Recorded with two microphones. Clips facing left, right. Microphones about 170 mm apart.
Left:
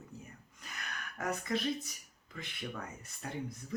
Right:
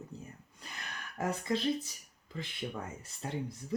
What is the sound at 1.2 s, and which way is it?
Speech, 30° right (ahead or behind).